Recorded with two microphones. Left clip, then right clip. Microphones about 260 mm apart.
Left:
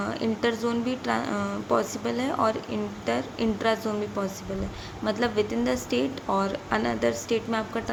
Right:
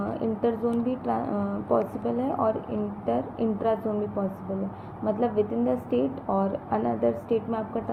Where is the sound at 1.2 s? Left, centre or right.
Left.